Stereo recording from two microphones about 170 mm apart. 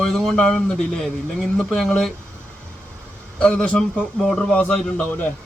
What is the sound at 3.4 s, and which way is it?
Speech, 5° left (ahead or behind).